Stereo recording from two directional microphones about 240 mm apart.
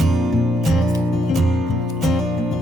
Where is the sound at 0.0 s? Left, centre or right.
Centre.